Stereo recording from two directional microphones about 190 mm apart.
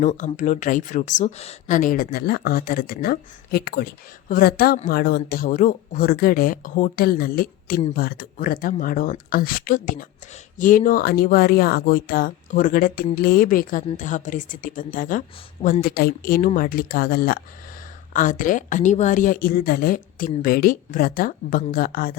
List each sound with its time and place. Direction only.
0.3 s speech: 40° left (ahead or behind)